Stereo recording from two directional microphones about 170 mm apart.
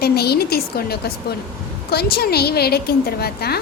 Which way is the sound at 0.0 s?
70° left (ahead or behind).